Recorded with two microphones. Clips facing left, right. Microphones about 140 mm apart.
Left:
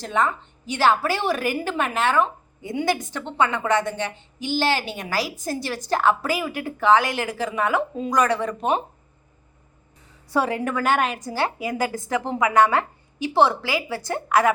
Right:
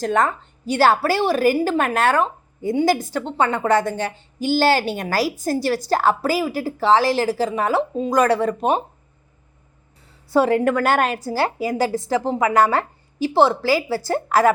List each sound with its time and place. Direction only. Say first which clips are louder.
0.0 s a woman's voice: right 4 dB; 45° right (ahead or behind)
10.3 s a woman's voice: right 6 dB; 35° right (ahead or behind)